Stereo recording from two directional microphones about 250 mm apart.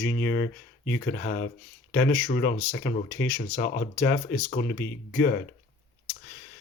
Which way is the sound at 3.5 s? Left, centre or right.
Left.